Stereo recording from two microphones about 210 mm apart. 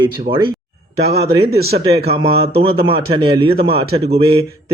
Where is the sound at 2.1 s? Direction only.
25° right (ahead or behind).